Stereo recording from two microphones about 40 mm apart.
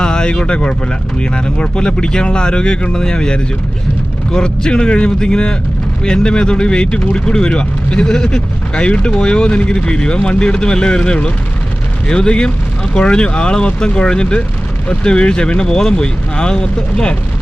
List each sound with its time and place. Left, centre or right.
0.0 s speech: centre
8.0 s speech: centre